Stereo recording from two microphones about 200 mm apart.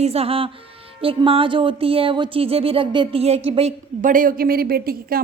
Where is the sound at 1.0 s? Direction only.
25° right (ahead or behind).